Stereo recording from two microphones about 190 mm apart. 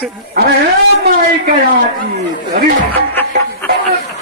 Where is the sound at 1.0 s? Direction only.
55° right (ahead or behind).